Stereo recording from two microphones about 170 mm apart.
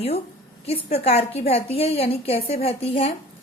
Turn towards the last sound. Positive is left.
turn(degrees=35)  # may be behind; listen again after turning